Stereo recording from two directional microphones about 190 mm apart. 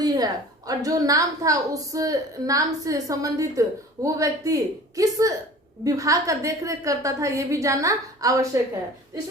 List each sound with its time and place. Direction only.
0.0 s a woman's voice: 20° right (ahead or behind)